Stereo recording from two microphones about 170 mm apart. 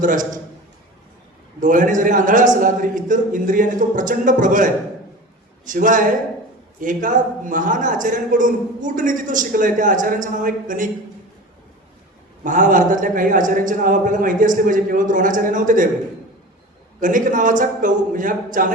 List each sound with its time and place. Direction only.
0.0 s a man's voice: 50° right (ahead or behind)
1.6 s a man's voice: 50° right (ahead or behind)
12.4 s a man's voice: 50° right (ahead or behind)
17.0 s a man's voice: 50° right (ahead or behind)